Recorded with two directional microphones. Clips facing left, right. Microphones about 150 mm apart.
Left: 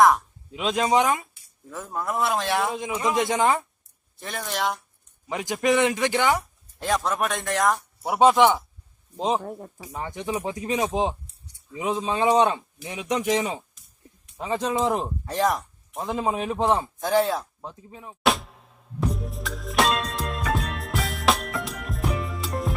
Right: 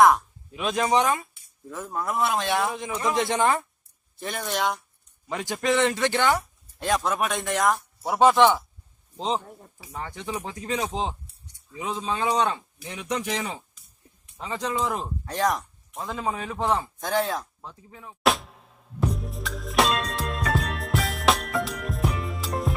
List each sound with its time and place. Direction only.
0.5 s speech: 20° left (ahead or behind)
1.7 s a man's voice: centre (ahead or behind)
2.7 s a man's voice: 15° left (ahead or behind)
4.2 s a man's voice: centre (ahead or behind)
5.3 s a man's voice: 20° left (ahead or behind)
6.7 s a man's voice: centre (ahead or behind)
8.0 s a man's voice: 15° left (ahead or behind)
9.4 s speech: 70° left (ahead or behind)
9.9 s speech: 15° left (ahead or behind)
15.2 s a man's voice: centre (ahead or behind)
16.0 s speech: 25° left (ahead or behind)
17.0 s a man's voice: centre (ahead or behind)
17.6 s speech: 20° left (ahead or behind)
18.2 s music: centre (ahead or behind)